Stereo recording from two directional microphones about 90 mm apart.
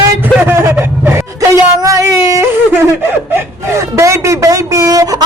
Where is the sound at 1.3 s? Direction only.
40° right (ahead or behind).